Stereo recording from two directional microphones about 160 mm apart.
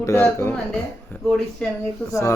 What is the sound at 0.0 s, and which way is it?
Speech, 15° left (ahead or behind).